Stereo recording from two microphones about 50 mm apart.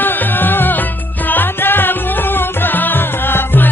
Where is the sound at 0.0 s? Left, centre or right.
Left.